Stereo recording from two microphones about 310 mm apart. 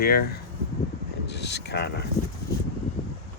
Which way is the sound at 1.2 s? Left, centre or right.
Left.